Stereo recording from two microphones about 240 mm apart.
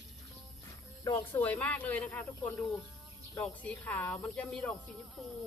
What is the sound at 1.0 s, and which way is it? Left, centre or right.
Speech, centre.